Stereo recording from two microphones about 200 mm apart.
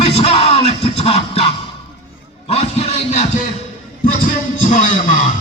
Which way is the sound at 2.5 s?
30° left (ahead or behind).